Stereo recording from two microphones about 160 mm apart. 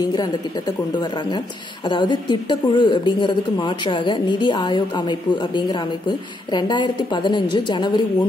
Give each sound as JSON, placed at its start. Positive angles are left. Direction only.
{"t": 0.0, "sound": "speech", "side_deg": 25}